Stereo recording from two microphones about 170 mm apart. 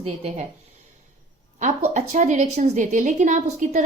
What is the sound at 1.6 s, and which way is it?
A woman's voice, 45° right (ahead or behind).